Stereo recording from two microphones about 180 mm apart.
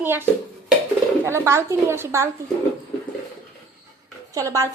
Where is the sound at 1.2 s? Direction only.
15° right (ahead or behind).